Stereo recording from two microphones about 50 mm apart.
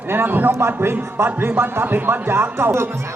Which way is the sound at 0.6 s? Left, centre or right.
Right.